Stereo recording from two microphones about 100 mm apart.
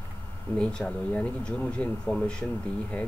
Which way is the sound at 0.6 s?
10° left (ahead or behind).